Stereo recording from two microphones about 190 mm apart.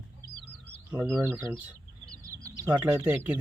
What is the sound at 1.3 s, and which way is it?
Speech, 15° right (ahead or behind).